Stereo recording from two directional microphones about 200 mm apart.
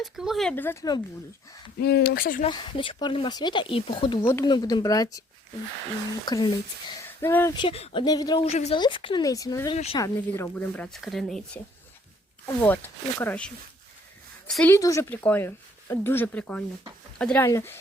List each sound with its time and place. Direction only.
0.0 s a woman's voice: centre (ahead or behind); by 1.0 s 15° left (ahead or behind)
1.8 s speech: 55° left (ahead or behind)
2.5 s speech: 20° left (ahead or behind)
4.2 s a woman's voice: 10° left (ahead or behind)
6.2 s speech: 20° left (ahead or behind)
7.2 s a woman's voice: 10° left (ahead or behind)
7.5 s speech: 25° left (ahead or behind)
8.4 s speech: 35° left (ahead or behind); by 9.7 s 15° left (ahead or behind)
9.7 s speech: 30° left (ahead or behind)
10.0 s speech: 10° left (ahead or behind)
12.6 s a woman's voice: 10° left (ahead or behind)